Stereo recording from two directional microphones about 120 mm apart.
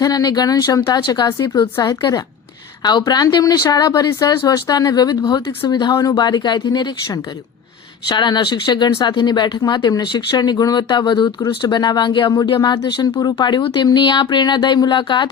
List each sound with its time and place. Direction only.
0.0 s speech: 35° left (ahead or behind)